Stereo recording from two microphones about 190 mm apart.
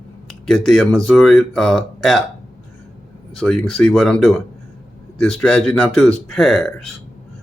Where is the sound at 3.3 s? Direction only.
5° left (ahead or behind).